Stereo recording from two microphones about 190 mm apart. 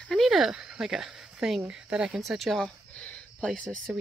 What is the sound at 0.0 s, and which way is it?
Speech, centre (ahead or behind).